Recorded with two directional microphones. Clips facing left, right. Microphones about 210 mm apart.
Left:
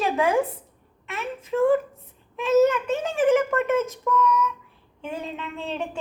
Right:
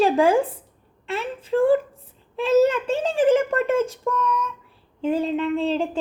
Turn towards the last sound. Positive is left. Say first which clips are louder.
# right 9 dB
turn(degrees=-30)  # may be behind; listen again after turning